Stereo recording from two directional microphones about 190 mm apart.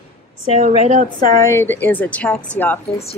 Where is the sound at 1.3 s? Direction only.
15° left (ahead or behind).